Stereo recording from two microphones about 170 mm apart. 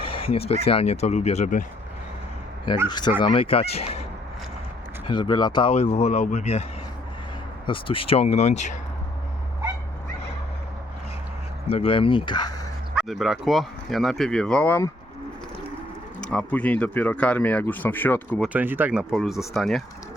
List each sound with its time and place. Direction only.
0.0 s speech: 35° left (ahead or behind)
2.9 s speech: 25° left (ahead or behind)
5.0 s speech: 25° left (ahead or behind)
5.7 s speech: 40° left (ahead or behind)
7.7 s speech: 30° left (ahead or behind)
11.7 s speech: 35° left (ahead or behind)
12.9 s speech: centre (ahead or behind)
16.2 s speech: 5° left (ahead or behind)
18.4 s speech: 10° right (ahead or behind)